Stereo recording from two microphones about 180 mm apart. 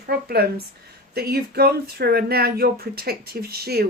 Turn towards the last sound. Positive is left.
turn(degrees=-60)  # may be behind; listen again after turning